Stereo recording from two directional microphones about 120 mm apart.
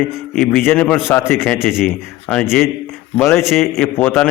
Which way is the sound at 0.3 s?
15° left (ahead or behind).